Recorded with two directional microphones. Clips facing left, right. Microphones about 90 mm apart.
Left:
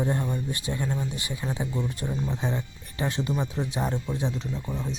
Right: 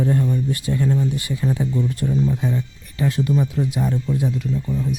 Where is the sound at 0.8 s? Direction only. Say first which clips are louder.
Right 11 dB; 10° left (ahead or behind).